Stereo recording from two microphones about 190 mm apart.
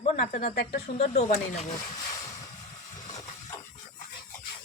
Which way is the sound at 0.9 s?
35° left (ahead or behind).